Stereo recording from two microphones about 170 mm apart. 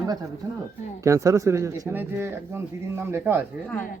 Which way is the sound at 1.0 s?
20° right (ahead or behind).